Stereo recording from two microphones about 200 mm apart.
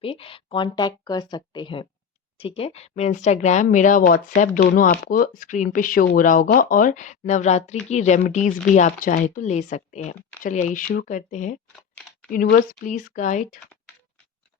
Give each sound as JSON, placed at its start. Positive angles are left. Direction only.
{"t": 0.0, "sound": "speech", "side_deg": 25}
{"t": 11.8, "sound": "a sound", "side_deg": 5}
{"t": 12.3, "sound": "speech", "side_deg": 45}